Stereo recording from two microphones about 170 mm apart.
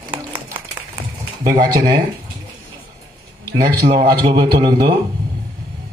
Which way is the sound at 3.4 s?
65° right (ahead or behind).